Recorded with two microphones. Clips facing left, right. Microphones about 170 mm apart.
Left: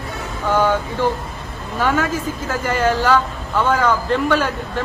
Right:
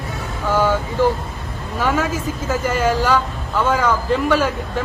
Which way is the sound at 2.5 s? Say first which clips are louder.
Even; 10° right (ahead or behind).